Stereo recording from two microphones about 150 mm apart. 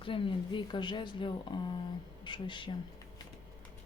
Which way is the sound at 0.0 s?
35° left (ahead or behind).